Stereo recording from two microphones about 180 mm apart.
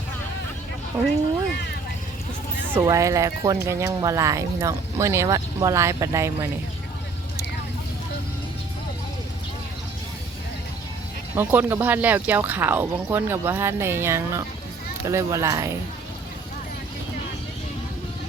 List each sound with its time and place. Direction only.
2.7 s speech: 15° right (ahead or behind)
11.3 s speech: 10° right (ahead or behind)